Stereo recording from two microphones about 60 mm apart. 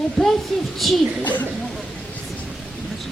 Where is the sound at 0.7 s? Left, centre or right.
Centre.